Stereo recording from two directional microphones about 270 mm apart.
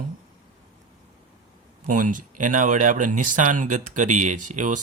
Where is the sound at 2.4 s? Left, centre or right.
Right.